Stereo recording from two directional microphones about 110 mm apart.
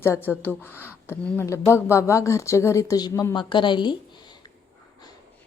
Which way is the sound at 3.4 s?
45° left (ahead or behind).